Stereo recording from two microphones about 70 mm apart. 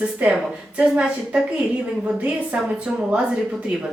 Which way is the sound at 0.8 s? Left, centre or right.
Centre.